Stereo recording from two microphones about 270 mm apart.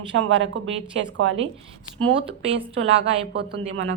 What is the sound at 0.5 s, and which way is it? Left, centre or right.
Speech, right.